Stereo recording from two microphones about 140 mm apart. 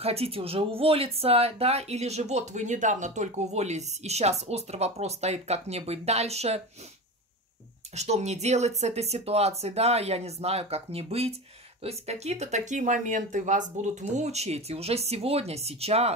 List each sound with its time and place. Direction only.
0.0 s speech: 45° right (ahead or behind)
7.9 s speech: 50° right (ahead or behind)